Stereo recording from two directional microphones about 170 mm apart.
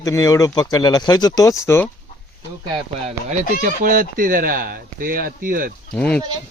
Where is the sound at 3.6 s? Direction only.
55° right (ahead or behind).